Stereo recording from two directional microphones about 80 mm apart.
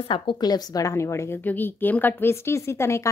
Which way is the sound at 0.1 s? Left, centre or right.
Left.